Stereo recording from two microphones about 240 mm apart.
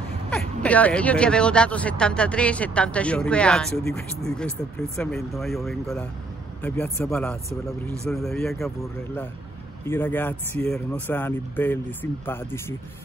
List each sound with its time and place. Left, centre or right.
0.3 s speech: centre